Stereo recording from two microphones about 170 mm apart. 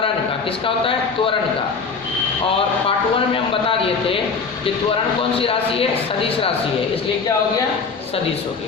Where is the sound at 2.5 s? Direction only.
30° left (ahead or behind).